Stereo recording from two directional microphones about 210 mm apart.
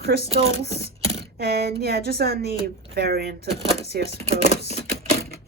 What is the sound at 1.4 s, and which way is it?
Speech, 50° right (ahead or behind).